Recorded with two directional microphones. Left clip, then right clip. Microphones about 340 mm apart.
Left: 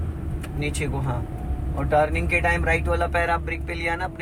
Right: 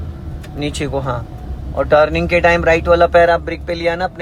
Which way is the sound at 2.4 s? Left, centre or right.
Right.